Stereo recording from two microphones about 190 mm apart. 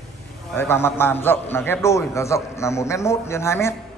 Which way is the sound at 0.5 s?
10° left (ahead or behind).